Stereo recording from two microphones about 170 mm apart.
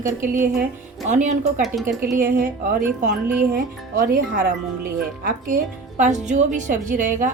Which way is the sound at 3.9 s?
55° right (ahead or behind).